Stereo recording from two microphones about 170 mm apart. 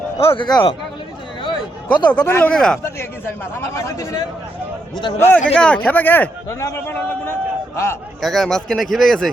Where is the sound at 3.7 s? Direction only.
20° left (ahead or behind).